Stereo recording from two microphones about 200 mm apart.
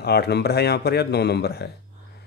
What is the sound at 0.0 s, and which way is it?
Speech, 55° left (ahead or behind).